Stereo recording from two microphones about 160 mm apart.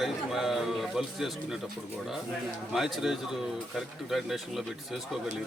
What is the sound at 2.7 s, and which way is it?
A man's voice, centre (ahead or behind).